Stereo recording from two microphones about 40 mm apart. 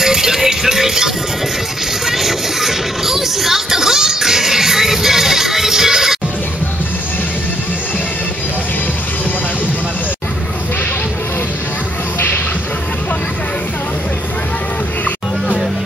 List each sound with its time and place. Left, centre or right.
0.0 s music: centre